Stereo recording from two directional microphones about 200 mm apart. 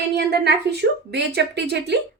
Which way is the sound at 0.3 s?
55° right (ahead or behind).